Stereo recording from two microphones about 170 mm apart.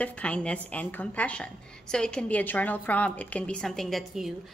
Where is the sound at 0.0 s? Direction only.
5° left (ahead or behind).